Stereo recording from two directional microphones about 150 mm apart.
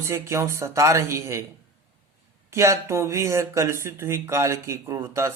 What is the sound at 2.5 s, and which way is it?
Speech, 20° right (ahead or behind).